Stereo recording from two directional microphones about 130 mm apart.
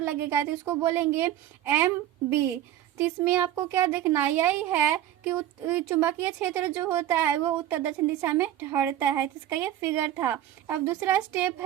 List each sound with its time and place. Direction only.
0.0 s a child's voice: 15° right (ahead or behind)
3.2 s a child's voice: 20° right (ahead or behind)